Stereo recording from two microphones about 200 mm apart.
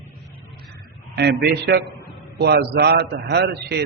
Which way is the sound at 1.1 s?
55° right (ahead or behind).